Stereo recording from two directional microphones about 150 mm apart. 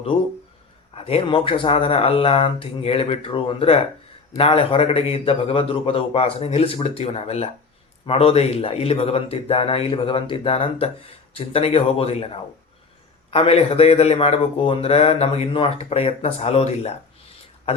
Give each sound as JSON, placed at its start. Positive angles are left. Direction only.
{"t": 0.9, "sound": "speech", "side_deg": 40}